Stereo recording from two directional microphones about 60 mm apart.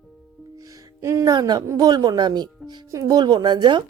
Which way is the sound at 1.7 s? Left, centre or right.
Right.